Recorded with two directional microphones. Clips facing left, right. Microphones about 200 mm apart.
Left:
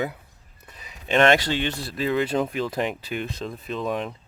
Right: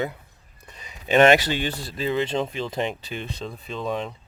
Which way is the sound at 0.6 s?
Centre (ahead or behind).